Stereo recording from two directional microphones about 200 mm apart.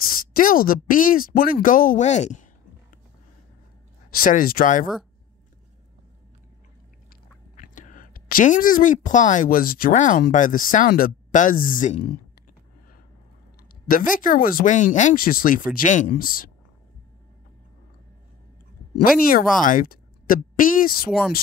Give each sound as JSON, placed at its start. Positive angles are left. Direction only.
{"t": 0.1, "sound": "speech", "side_deg": 45}
{"t": 4.1, "sound": "speech", "side_deg": 45}
{"t": 7.5, "sound": "a woman's voice", "side_deg": 40}
{"t": 13.8, "sound": "speech", "side_deg": 45}
{"t": 19.6, "sound": "speech", "side_deg": 40}